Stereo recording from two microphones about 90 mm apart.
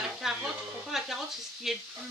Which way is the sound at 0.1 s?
5° right (ahead or behind).